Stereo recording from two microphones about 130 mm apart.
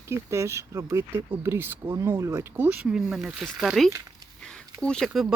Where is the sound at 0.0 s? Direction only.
20° right (ahead or behind).